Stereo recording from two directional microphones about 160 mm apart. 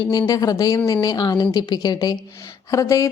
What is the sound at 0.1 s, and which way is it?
A woman's voice, 25° left (ahead or behind).